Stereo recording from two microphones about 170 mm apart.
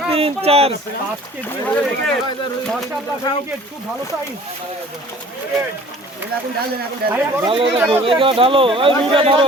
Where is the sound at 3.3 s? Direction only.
25° left (ahead or behind).